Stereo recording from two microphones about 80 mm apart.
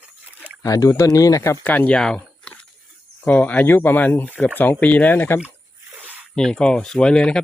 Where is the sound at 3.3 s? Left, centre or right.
Centre.